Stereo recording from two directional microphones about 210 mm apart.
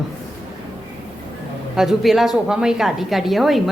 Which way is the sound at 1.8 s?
Centre (ahead or behind).